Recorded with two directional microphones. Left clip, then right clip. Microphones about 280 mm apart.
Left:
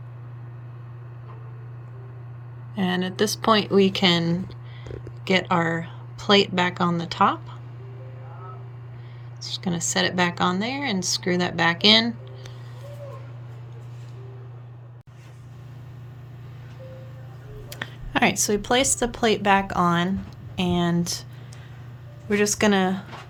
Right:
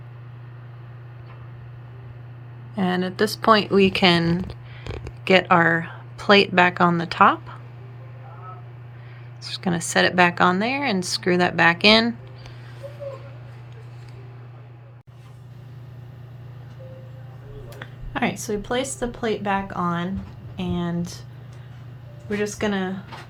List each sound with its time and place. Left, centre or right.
2.7 s speech: centre
9.6 s speech: centre
17.7 s speech: left
22.3 s speech: left